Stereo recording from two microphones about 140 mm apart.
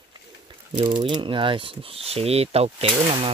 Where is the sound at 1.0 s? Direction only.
35° right (ahead or behind).